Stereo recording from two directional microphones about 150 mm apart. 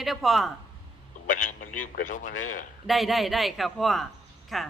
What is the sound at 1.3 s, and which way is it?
A man's voice, 60° left (ahead or behind).